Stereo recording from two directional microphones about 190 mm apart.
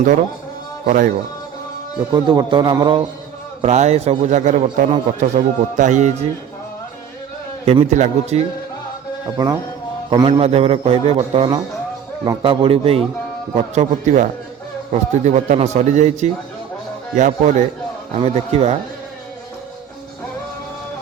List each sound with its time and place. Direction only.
0.9 s speech: 45° right (ahead or behind)
2.1 s a man's voice: 20° right (ahead or behind)
3.6 s a man's voice: 35° right (ahead or behind)
7.6 s a man's voice: 35° right (ahead or behind)
9.2 s a man's voice: 20° right (ahead or behind); by 17.5 s 40° right (ahead or behind)
18.2 s a man's voice: 30° right (ahead or behind)